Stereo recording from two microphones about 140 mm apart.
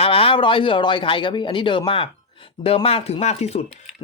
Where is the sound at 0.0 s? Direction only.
40° left (ahead or behind).